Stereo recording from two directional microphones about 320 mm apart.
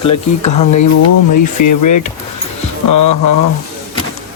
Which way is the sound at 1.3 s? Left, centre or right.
Left.